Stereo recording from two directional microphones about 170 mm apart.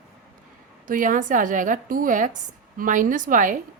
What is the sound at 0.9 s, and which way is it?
Speech, 50° right (ahead or behind).